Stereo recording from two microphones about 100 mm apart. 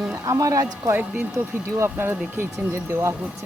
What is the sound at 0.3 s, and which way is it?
Speech, 35° right (ahead or behind).